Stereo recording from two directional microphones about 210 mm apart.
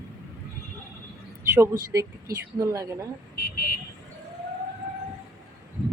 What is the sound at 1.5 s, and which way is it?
Speech, 15° right (ahead or behind).